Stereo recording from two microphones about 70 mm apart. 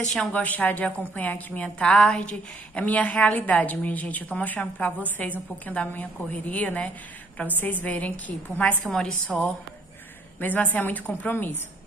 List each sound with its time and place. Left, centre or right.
0.3 s a woman's voice: left
8.8 s a woman's voice: centre
10.4 s a woman's voice: left